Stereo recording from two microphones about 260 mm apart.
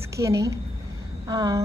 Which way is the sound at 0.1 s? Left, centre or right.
Centre.